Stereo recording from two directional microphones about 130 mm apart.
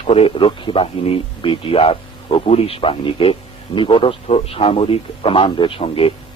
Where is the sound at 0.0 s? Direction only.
50° left (ahead or behind).